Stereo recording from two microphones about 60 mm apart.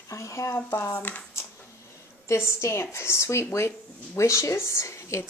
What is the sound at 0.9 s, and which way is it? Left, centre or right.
Speech, left.